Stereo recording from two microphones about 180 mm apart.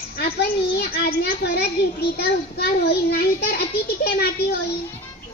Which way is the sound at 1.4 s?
65° left (ahead or behind).